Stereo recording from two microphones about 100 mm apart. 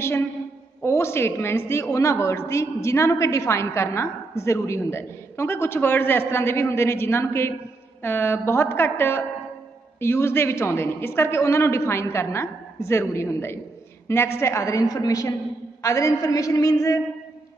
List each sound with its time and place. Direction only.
0.8 s a woman's voice: 25° left (ahead or behind)